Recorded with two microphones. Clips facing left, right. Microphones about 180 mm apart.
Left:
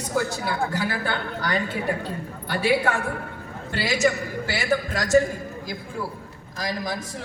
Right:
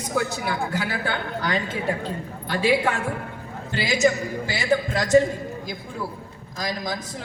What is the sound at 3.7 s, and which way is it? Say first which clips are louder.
A man's voice: right 2 dB; 20° right (ahead or behind).